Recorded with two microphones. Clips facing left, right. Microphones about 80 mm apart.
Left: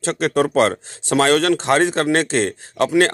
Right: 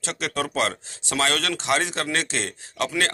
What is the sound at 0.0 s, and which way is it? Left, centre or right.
A man's voice, left.